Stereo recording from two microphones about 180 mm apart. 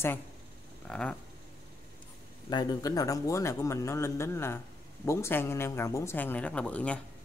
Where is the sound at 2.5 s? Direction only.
25° left (ahead or behind).